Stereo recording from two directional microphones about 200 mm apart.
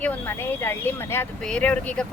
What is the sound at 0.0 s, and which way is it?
Speech, 10° left (ahead or behind).